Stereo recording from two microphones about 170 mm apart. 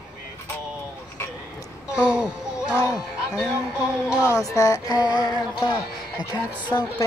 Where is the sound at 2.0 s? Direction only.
5° right (ahead or behind).